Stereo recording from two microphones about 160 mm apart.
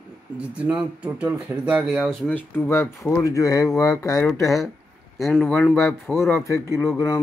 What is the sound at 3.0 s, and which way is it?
Speech, centre (ahead or behind).